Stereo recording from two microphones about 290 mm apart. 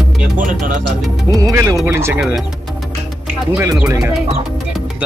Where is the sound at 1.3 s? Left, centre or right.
Centre.